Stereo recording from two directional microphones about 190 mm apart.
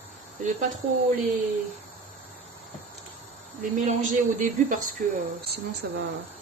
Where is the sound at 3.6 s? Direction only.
40° right (ahead or behind).